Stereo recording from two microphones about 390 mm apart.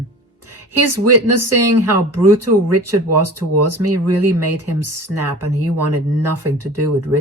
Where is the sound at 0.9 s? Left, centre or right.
Right.